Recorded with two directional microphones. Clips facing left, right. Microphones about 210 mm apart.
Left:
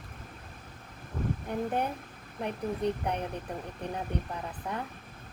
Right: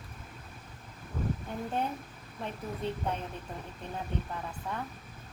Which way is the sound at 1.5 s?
15° left (ahead or behind).